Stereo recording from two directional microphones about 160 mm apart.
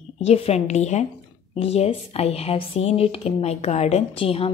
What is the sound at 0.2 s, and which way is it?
A woman's voice, 40° left (ahead or behind).